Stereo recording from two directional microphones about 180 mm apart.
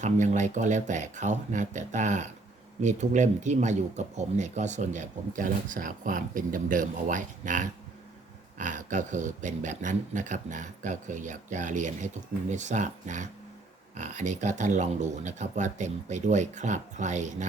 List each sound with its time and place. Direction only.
0.0 s speech: 40° right (ahead or behind)